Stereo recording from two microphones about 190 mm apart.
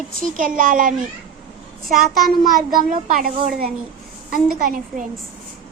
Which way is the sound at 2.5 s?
45° right (ahead or behind).